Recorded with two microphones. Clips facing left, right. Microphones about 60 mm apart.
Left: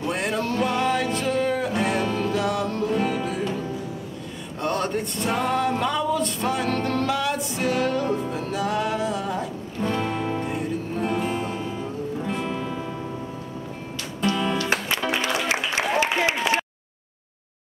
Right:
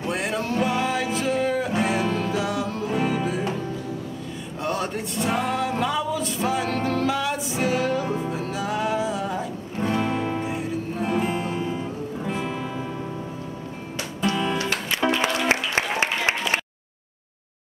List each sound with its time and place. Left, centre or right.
0.0 s music: centre
4.6 s music: centre
14.2 s music: centre
15.4 s applause: right